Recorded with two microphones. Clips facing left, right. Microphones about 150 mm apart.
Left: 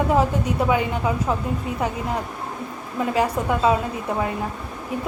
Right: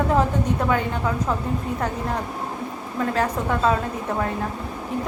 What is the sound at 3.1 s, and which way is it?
Speech, 10° left (ahead or behind).